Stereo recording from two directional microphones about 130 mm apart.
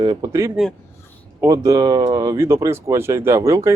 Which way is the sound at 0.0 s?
30° right (ahead or behind).